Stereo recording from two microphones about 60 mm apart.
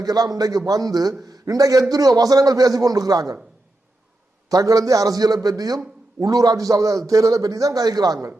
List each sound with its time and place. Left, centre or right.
0.0 s a man's voice: right
4.4 s a man's voice: right
7.1 s a man's voice: right